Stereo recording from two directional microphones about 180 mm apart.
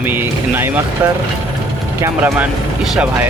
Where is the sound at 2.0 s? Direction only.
15° right (ahead or behind).